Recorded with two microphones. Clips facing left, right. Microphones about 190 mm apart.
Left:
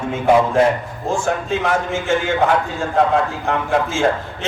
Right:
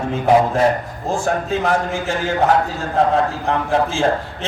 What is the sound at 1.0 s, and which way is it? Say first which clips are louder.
A man's voice: even; 35° right (ahead or behind).